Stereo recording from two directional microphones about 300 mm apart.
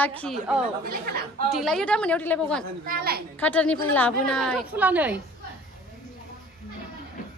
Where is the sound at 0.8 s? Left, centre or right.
Right.